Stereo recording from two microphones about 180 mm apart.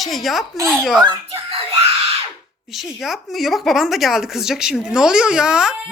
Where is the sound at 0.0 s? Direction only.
Centre (ahead or behind).